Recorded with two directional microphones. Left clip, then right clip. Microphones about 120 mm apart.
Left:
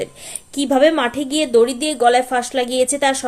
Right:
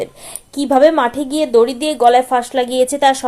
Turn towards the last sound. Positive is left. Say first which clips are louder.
# right 4 dB
turn(degrees=-25)  # may be behind; listen again after turning